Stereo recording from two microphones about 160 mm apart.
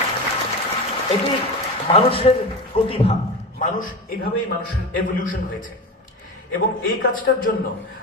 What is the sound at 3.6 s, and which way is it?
A man's voice, 55° left (ahead or behind).